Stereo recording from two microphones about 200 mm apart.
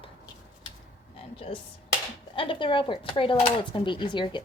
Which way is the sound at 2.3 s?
25° left (ahead or behind).